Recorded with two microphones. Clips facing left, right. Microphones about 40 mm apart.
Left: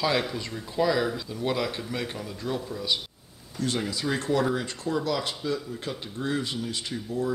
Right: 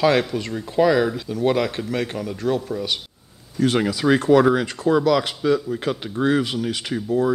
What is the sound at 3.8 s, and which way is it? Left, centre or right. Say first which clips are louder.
Speech: right 11 dB; right.